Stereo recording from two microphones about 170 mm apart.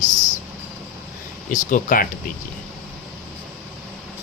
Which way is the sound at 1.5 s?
50° left (ahead or behind).